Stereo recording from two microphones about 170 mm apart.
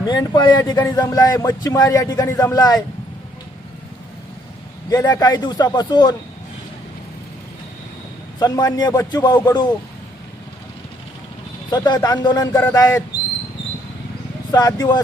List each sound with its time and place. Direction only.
0.0 s speech: 25° left (ahead or behind)
4.9 s speech: 20° left (ahead or behind)
8.4 s speech: 25° left (ahead or behind)
11.7 s speech: 25° left (ahead or behind)
14.8 s speech: 25° left (ahead or behind)